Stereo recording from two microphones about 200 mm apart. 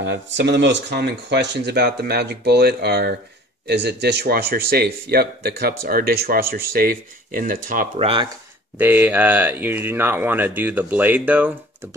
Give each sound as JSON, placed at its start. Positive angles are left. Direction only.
{"t": 0.0, "sound": "speech", "side_deg": -60}
{"t": 8.0, "sound": "speech", "side_deg": -25}
{"t": 8.7, "sound": "speech", "side_deg": -10}